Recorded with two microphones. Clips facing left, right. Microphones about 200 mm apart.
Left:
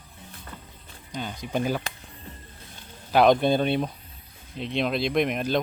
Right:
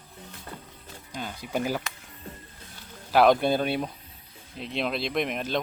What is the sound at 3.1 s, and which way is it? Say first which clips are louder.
Speech: left 1 dB; 5° right (ahead or behind).